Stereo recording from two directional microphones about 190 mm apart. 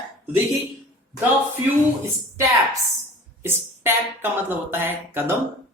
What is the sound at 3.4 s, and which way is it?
Speech, 10° right (ahead or behind).